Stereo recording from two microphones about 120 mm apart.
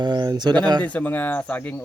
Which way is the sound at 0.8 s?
10° left (ahead or behind).